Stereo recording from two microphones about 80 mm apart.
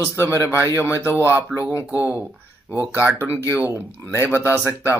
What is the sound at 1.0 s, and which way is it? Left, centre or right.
Speech, right.